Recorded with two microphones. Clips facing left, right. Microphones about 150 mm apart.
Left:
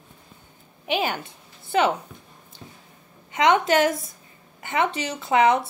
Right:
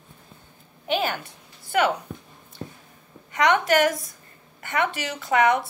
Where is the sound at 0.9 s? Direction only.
20° left (ahead or behind).